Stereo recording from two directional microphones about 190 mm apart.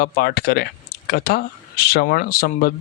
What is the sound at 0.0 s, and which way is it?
Speech, 55° left (ahead or behind).